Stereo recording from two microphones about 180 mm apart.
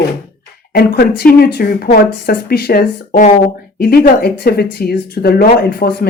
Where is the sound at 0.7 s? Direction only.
60° left (ahead or behind).